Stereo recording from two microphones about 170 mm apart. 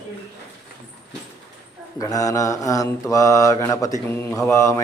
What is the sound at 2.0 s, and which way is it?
A man's voice, 20° left (ahead or behind).